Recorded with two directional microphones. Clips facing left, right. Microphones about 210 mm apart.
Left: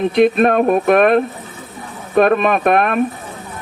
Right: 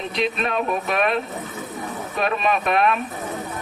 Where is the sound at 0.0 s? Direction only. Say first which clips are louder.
Left 12 dB; 55° left (ahead or behind).